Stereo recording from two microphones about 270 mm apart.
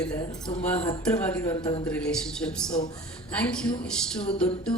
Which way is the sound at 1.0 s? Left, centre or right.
Centre.